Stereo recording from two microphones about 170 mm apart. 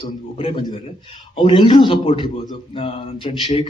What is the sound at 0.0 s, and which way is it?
A man's voice, 30° left (ahead or behind).